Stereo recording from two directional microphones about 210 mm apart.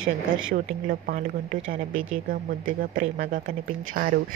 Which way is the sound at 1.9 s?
70° right (ahead or behind).